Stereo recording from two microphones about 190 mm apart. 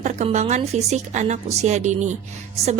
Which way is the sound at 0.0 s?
35° right (ahead or behind).